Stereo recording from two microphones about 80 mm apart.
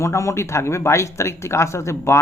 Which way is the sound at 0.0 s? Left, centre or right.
Left.